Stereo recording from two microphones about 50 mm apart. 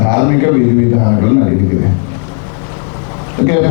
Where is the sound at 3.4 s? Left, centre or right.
Left.